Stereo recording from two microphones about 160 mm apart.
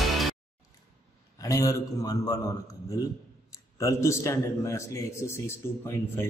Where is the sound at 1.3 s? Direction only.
20° left (ahead or behind).